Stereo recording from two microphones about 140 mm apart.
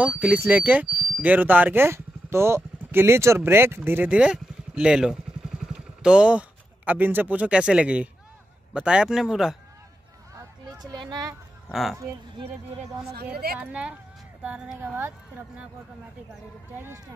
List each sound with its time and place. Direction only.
0.0 s speech: 10° right (ahead or behind)
10.3 s a sound: 30° right (ahead or behind)
11.7 s speech: centre (ahead or behind)
13.1 s a woman's voice: 90° right
13.6 s speech: 10° right (ahead or behind)
16.7 s speech: 15° right (ahead or behind)